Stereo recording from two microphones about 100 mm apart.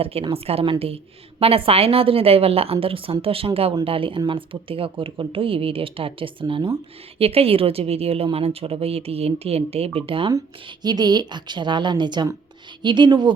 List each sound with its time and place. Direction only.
0.0 s a woman's voice: 75° right (ahead or behind)
2.8 s a woman's voice: 65° right (ahead or behind)
7.2 s speech: 75° right (ahead or behind); by 10.3 s 60° right (ahead or behind)
10.8 s a woman's voice: 45° right (ahead or behind)